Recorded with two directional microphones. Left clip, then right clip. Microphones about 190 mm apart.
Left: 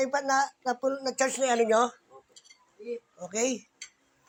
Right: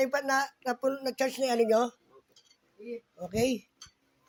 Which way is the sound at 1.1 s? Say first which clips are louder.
Left 3 dB; 40° right (ahead or behind).